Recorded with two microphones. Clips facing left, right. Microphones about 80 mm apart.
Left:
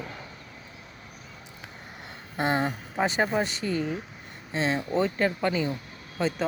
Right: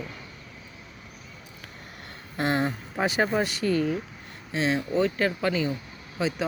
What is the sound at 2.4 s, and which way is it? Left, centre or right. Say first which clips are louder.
Speech: even; centre.